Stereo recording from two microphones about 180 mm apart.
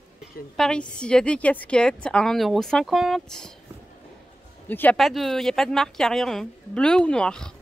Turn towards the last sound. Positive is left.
turn(degrees=5)  # may be behind; listen again after turning